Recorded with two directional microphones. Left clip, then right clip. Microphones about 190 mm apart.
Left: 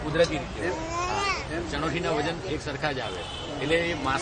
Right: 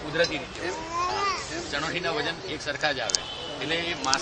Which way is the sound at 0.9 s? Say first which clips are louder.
Right 2 dB; 50° left (ahead or behind).